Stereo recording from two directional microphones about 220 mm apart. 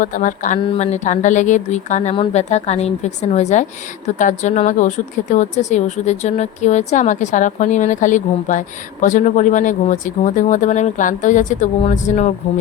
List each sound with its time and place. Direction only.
0.0 s speech: 35° left (ahead or behind)